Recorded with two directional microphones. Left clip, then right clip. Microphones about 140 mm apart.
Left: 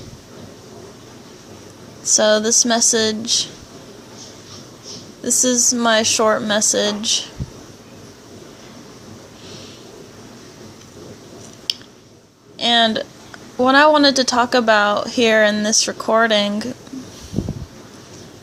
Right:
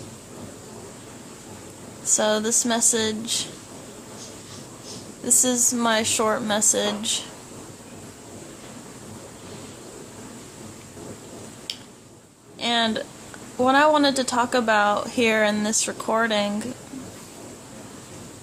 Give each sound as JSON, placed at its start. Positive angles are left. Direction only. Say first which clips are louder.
{"t": 2.1, "sound": "a woman's voice", "louder": "left 8 dB", "side_deg": 25}
{"t": 5.2, "sound": "a woman's voice", "louder": "left 5 dB", "side_deg": 25}
{"t": 12.5, "sound": "a sound", "louder": "left 7 dB", "side_deg": 30}
{"t": 13.6, "sound": "a woman's voice", "louder": "left 6 dB", "side_deg": 35}